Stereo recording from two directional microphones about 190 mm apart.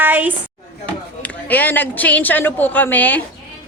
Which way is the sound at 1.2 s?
10° left (ahead or behind).